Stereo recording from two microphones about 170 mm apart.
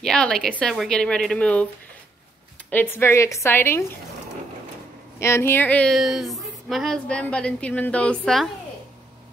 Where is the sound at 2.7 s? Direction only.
10° left (ahead or behind).